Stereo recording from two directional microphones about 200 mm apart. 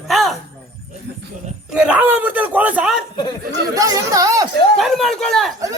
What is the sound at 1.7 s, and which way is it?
Speech, 5° right (ahead or behind).